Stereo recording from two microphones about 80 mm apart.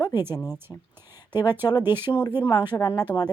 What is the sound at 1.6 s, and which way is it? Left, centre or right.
A woman's voice, left.